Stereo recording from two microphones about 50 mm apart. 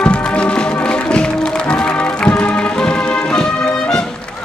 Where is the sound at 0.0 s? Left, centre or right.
Left.